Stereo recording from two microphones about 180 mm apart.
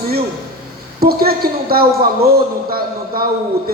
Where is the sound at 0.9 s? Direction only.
55° right (ahead or behind).